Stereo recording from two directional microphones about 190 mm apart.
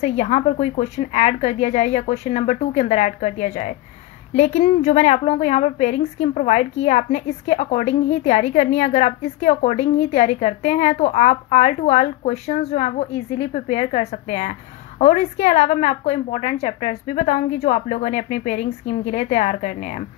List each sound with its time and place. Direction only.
0.0 s a woman's voice: 35° left (ahead or behind)